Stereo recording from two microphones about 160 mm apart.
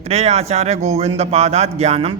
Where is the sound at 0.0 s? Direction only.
40° right (ahead or behind).